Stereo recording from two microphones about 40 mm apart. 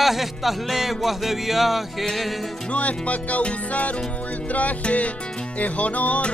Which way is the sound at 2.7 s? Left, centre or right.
Left.